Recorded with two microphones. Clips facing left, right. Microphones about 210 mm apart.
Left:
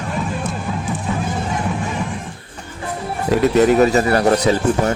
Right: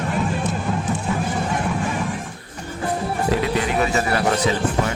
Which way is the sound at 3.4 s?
45° left (ahead or behind).